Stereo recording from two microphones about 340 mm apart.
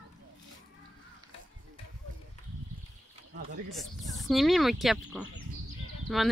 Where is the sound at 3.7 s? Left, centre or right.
Centre.